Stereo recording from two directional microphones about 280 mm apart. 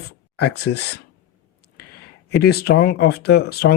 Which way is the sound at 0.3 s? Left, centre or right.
Left.